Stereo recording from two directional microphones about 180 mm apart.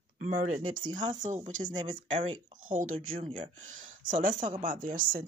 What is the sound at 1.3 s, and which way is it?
Speech, 40° right (ahead or behind).